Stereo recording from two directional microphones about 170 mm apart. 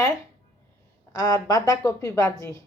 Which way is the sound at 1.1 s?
20° left (ahead or behind).